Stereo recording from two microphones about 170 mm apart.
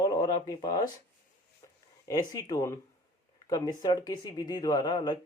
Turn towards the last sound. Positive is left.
turn(degrees=25)  # may be behind; listen again after turning